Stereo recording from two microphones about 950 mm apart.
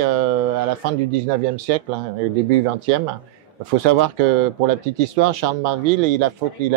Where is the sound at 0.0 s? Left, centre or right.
Right.